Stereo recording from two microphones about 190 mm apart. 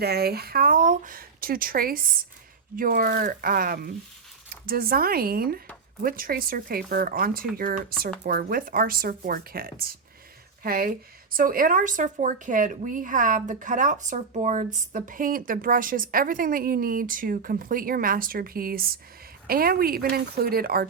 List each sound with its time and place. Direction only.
0.0 s speech: 55° right (ahead or behind)